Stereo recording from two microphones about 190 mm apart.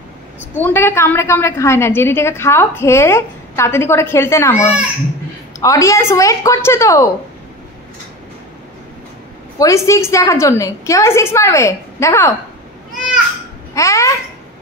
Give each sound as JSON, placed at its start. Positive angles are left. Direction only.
{"t": 0.6, "sound": "a woman's voice", "side_deg": 10}
{"t": 5.6, "sound": "a woman's voice", "side_deg": 15}
{"t": 9.6, "sound": "a woman's voice", "side_deg": 15}
{"t": 13.7, "sound": "a woman's voice", "side_deg": 15}